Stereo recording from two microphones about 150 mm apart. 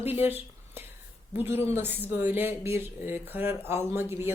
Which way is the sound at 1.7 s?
15° right (ahead or behind).